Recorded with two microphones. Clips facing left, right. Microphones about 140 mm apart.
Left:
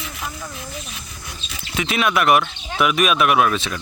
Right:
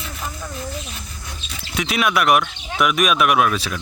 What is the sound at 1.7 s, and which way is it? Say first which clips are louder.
Speech: even; centre (ahead or behind).